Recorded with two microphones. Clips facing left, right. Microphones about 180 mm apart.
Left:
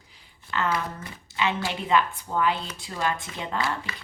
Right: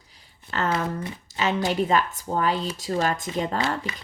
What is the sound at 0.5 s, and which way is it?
Shuffling cards, 40° right (ahead or behind).